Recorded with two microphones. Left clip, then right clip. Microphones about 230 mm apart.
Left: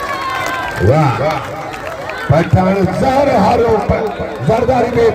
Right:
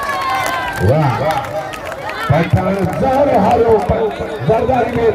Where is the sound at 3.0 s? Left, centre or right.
Left.